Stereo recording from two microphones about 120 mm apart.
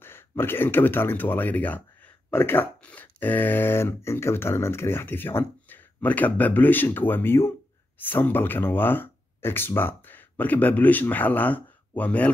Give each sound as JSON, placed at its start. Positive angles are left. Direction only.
{"t": 0.0, "sound": "speech", "side_deg": 20}